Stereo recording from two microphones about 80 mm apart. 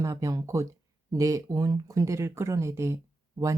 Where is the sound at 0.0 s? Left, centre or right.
Right.